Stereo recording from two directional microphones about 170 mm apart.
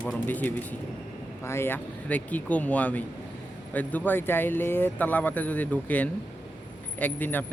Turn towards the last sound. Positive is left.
turn(degrees=10)  # may be behind; listen again after turning